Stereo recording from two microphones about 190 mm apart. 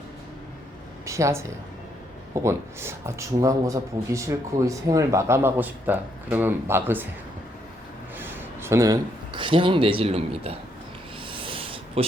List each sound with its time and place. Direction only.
1.0 s a man's voice: 15° right (ahead or behind)
8.2 s speech: 10° right (ahead or behind); by 10.6 s 30° right (ahead or behind)
11.3 s a sound: 25° right (ahead or behind)